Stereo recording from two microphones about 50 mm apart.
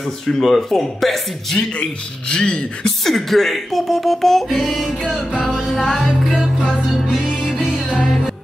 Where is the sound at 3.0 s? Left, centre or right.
Centre.